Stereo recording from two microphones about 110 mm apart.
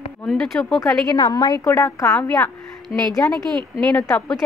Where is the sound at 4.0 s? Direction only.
25° left (ahead or behind).